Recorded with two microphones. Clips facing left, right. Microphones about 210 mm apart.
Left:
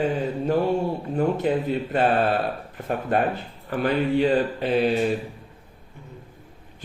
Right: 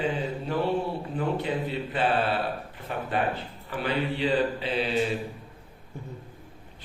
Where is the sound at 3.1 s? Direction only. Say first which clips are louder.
Left 4 dB; 45° left (ahead or behind).